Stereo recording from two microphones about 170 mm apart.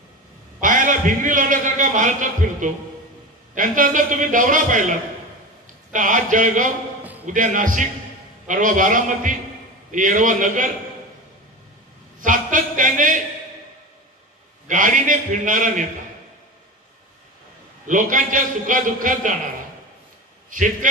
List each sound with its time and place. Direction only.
0.6 s a man's voice: 50° right (ahead or behind)
5.9 s a man's voice: 50° right (ahead or behind)
7.0 s a sound: 10° right (ahead or behind)
7.2 s a man's voice: 50° right (ahead or behind)
12.2 s a man's voice: 50° right (ahead or behind)
14.7 s a man's voice: 50° right (ahead or behind)
17.8 s a man's voice: 50° right (ahead or behind)
20.4 s a man's voice: 50° right (ahead or behind)